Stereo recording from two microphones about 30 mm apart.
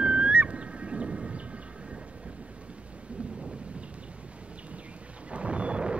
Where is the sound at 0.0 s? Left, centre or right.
Right.